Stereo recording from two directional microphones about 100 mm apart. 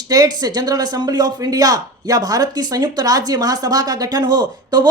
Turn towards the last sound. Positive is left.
turn(degrees=-40)  # may be behind; listen again after turning